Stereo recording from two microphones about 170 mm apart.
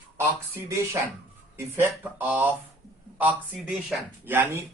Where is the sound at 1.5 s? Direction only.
15° right (ahead or behind).